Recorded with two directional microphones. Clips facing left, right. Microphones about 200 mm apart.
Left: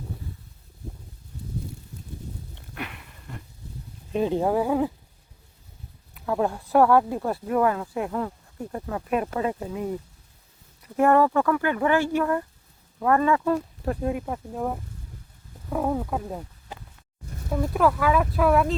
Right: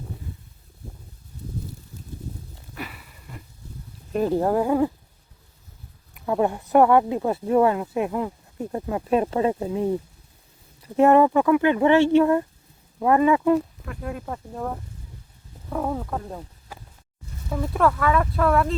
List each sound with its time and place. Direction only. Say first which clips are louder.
2.6 s a sound: even; centre (ahead or behind)
4.1 s speech: right 2 dB; 5° right (ahead or behind)
6.1 s a sound: right 2 dB; 5° right (ahead or behind)
6.7 s speech: right 2 dB; 5° right (ahead or behind)
7.3 s speech: right 4 dB; 25° right (ahead or behind)
13.8 s speech: left 8 dB; 35° left (ahead or behind)
14.1 s speech: left 3 dB; 15° left (ahead or behind)
14.3 s speech: left 2 dB; 5° left (ahead or behind)
15.7 s speech: left 1 dB; 5° left (ahead or behind)
17.5 s speech: even; 5° left (ahead or behind)